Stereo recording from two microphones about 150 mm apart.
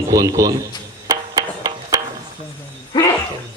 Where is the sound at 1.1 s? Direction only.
25° right (ahead or behind).